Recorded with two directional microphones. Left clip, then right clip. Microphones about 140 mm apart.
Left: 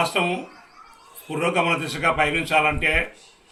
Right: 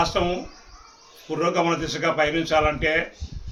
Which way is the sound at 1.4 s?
15° right (ahead or behind).